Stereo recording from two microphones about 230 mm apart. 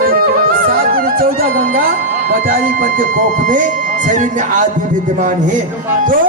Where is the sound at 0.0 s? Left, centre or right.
Right.